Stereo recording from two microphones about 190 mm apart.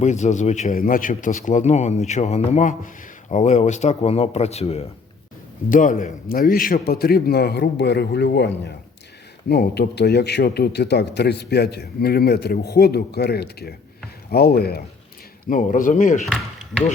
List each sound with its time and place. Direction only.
0.0 s a man's voice: 40° left (ahead or behind)
5.6 s a man's voice: 45° left (ahead or behind)
15.4 s speech: 45° left (ahead or behind)